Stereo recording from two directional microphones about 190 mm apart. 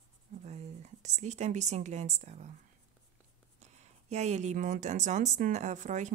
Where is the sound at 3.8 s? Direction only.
35° right (ahead or behind).